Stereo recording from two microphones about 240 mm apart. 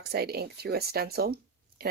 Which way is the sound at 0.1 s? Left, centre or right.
Right.